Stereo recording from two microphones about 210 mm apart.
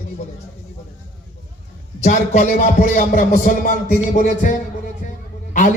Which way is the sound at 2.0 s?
35° left (ahead or behind).